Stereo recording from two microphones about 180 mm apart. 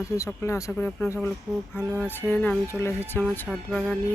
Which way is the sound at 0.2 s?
15° left (ahead or behind).